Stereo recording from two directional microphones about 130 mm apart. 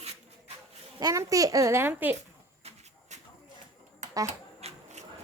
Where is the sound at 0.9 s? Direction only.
25° right (ahead or behind).